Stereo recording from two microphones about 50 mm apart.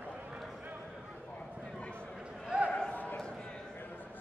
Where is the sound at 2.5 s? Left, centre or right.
Right.